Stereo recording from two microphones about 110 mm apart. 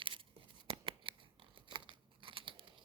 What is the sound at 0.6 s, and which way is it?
Shuffling cards, 50° right (ahead or behind).